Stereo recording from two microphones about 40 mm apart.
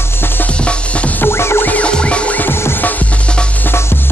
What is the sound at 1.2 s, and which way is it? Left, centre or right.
Music, left.